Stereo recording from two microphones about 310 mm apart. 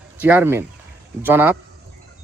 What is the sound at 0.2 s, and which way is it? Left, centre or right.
Speech, centre.